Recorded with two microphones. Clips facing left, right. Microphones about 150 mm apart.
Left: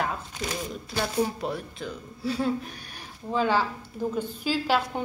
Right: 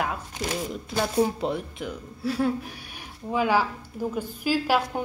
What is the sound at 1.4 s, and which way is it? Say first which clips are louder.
Speech: right 3 dB; 20° right (ahead or behind).